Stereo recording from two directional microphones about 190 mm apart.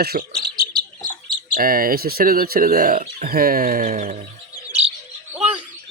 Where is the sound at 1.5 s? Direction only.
50° right (ahead or behind).